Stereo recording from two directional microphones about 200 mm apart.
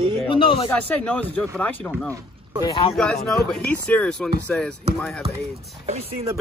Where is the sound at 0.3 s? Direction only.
25° left (ahead or behind).